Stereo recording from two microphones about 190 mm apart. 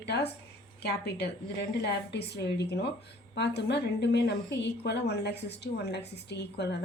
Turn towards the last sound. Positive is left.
turn(degrees=60)  # may be behind; listen again after turning